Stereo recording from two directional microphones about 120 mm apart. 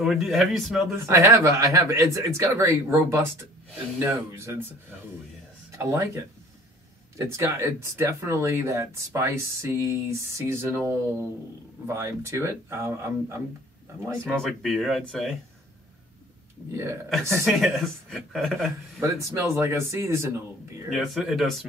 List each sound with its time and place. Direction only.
0.0 s speech: centre (ahead or behind)
0.9 s speech: 25° right (ahead or behind)
5.8 s speech: 25° right (ahead or behind)
14.2 s speech: 5° left (ahead or behind)
16.7 s speech: 25° right (ahead or behind)
17.5 s speech: centre (ahead or behind)
19.0 s speech: 25° right (ahead or behind)
20.9 s speech: centre (ahead or behind)